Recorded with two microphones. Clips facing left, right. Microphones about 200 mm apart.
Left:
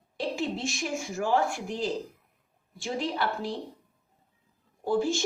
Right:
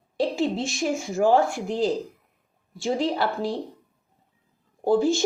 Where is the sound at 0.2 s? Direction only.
35° right (ahead or behind).